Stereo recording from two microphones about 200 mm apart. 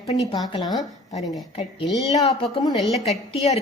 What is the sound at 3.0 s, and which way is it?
Speech, 30° left (ahead or behind).